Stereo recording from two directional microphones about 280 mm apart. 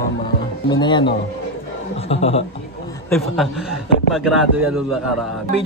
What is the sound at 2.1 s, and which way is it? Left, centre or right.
Speech, left.